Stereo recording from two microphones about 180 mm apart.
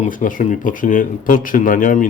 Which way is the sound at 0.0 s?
45° left (ahead or behind).